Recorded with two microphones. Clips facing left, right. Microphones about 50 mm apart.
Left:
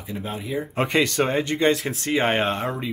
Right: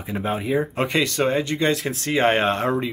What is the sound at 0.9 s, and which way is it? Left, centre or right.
Speech, left.